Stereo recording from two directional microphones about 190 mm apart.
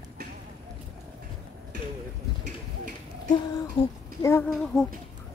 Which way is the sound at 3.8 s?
25° left (ahead or behind).